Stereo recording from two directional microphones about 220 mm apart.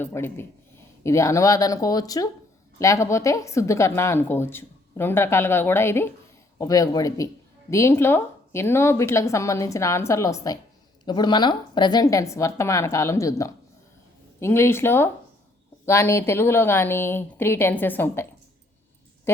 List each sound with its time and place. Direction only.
0.0 s a woman's voice: 10° left (ahead or behind)